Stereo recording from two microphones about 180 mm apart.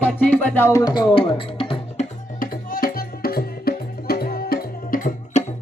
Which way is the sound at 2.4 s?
50° left (ahead or behind).